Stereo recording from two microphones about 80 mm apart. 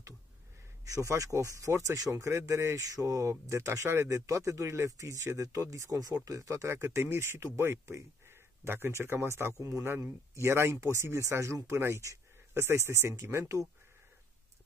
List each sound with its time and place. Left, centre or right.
0.8 s speech: right
10.4 s speech: right